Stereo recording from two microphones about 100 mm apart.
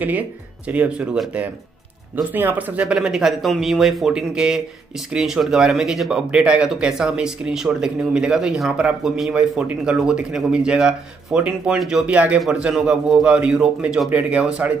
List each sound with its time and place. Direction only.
0.7 s a man's voice: 15° right (ahead or behind)
2.3 s a man's voice: 20° right (ahead or behind)
2.8 s a man's voice: 5° right (ahead or behind)